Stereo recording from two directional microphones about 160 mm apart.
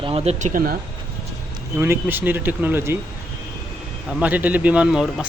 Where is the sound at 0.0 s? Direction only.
40° right (ahead or behind); by 0.8 s 60° right (ahead or behind).